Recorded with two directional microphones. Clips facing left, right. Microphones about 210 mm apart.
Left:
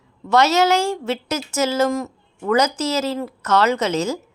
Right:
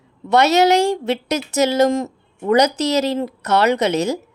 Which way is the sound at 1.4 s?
35° right (ahead or behind).